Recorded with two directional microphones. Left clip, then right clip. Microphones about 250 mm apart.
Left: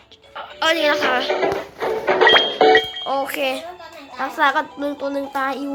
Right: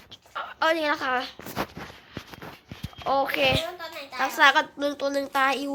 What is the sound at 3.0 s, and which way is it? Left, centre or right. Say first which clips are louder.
A woman's voice: left 2 dB; centre.